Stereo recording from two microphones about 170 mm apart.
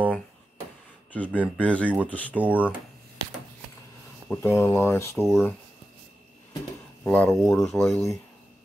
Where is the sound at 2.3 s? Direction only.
10° right (ahead or behind).